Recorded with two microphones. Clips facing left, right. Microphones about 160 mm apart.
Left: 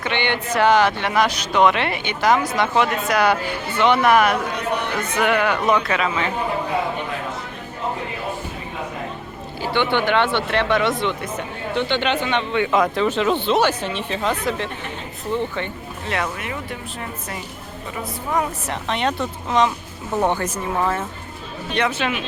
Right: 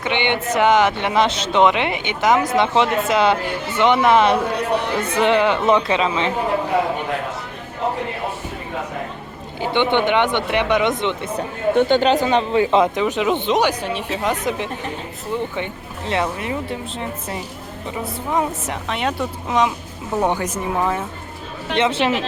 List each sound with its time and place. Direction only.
0.0 s speech: 20° right (ahead or behind)
9.6 s speech: 20° right (ahead or behind)
11.7 s speech: 45° right (ahead or behind); by 15.5 s 10° right (ahead or behind)
16.0 s speech: 30° right (ahead or behind)
18.7 s speech: 5° right (ahead or behind)
21.8 s speech: 25° right (ahead or behind)